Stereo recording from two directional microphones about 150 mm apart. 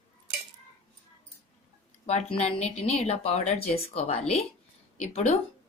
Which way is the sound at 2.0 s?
45° left (ahead or behind).